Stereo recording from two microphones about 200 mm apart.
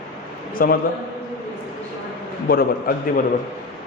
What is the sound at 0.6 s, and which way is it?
Speech, 45° left (ahead or behind).